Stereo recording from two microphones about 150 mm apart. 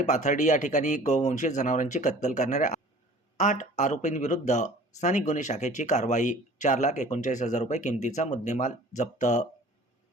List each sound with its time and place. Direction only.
0.0 s speech: 50° left (ahead or behind)